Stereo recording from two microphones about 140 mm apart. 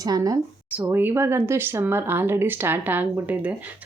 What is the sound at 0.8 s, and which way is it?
A woman's voice, 15° right (ahead or behind).